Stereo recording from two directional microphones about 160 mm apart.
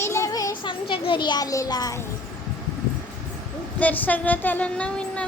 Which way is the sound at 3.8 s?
10° left (ahead or behind).